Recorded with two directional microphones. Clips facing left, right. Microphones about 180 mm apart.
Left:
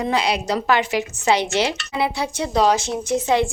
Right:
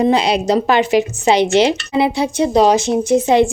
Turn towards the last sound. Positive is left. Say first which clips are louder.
# right 7 dB
turn(degrees=-20)  # may be behind; listen again after turning